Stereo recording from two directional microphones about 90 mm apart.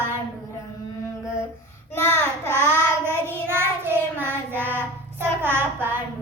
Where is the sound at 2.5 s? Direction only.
25° right (ahead or behind).